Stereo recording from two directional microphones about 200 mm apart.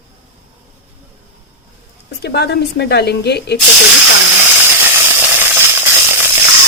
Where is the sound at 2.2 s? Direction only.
55° left (ahead or behind).